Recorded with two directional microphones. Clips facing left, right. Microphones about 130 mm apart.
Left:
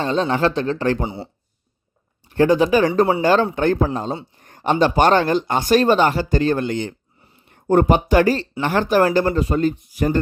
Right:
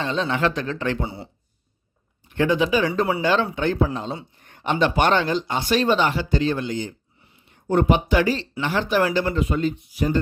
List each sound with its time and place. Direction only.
0.0 s a man's voice: 40° left (ahead or behind)
1.0 s speech: 25° left (ahead or behind)
2.2 s a man's voice: 35° left (ahead or behind)
5.2 s speech: 50° left (ahead or behind)
7.4 s speech: 50° left (ahead or behind)